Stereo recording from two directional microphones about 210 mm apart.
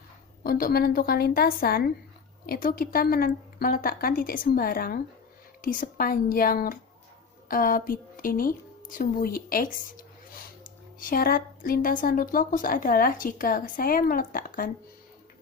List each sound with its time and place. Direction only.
0.4 s a woman's voice: 45° left (ahead or behind)